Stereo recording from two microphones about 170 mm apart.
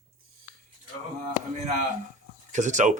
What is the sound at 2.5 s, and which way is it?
Speech, 45° right (ahead or behind).